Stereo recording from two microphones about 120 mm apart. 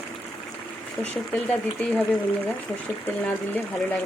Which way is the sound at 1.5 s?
10° left (ahead or behind).